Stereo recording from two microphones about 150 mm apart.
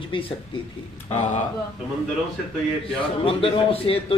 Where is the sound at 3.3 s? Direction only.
35° left (ahead or behind).